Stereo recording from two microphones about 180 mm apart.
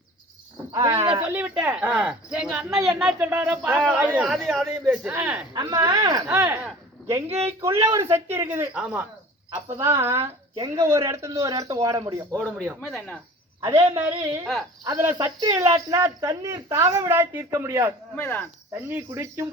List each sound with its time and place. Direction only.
0.7 s speech: 20° right (ahead or behind)
0.9 s speech: 30° right (ahead or behind)
1.2 s a man's voice: 10° right (ahead or behind)
4.2 s a man's voice: centre (ahead or behind)
5.0 s speech: 10° right (ahead or behind)
5.5 s a man's voice: 20° right (ahead or behind)
10.2 s speech: 30° right (ahead or behind)
10.8 s speech: 15° right (ahead or behind)
12.4 s a man's voice: centre (ahead or behind)
13.8 s speech: 15° right (ahead or behind)
14.1 s speech: 30° right (ahead or behind)
14.8 s speech: 15° right (ahead or behind)
18.2 s speech: 10° left (ahead or behind)
18.7 s speech: 10° right (ahead or behind)